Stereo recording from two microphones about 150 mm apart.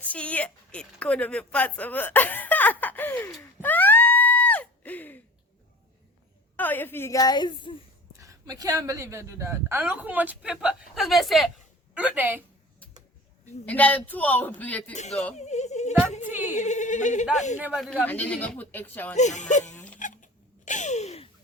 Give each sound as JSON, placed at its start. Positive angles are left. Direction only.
{"t": 0.0, "sound": "a woman's voice", "side_deg": 10}
{"t": 3.4, "sound": "a sound", "side_deg": 10}
{"t": 6.6, "sound": "a woman's voice", "side_deg": 10}
{"t": 8.2, "sound": "a woman's voice", "side_deg": -25}
{"t": 13.7, "sound": "speech", "side_deg": 10}
{"t": 15.4, "sound": "yodeling", "side_deg": 50}
{"t": 16.2, "sound": "a sound", "side_deg": -10}
{"t": 16.6, "sound": "speech", "side_deg": 50}
{"t": 17.7, "sound": "speech", "side_deg": 0}
{"t": 18.0, "sound": "speech", "side_deg": 10}
{"t": 19.1, "sound": "speech", "side_deg": 50}
{"t": 19.7, "sound": "a sound", "side_deg": 10}
{"t": 20.0, "sound": "a sound", "side_deg": 60}